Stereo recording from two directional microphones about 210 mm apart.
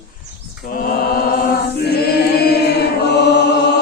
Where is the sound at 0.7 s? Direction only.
45° left (ahead or behind).